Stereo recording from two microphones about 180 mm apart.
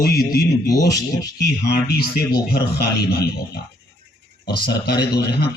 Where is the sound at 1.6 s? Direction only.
60° left (ahead or behind).